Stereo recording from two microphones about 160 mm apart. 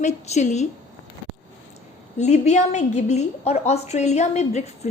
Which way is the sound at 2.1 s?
45° left (ahead or behind).